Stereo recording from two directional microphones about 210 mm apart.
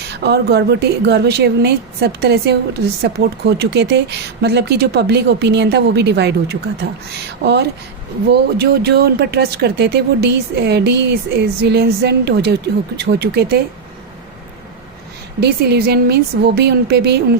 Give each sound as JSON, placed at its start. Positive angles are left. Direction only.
{"t": 0.2, "sound": "a woman's voice", "side_deg": -50}
{"t": 15.4, "sound": "a woman's voice", "side_deg": -50}